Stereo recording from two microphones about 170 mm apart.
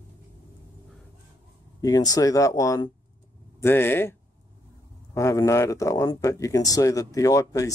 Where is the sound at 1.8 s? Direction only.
20° left (ahead or behind).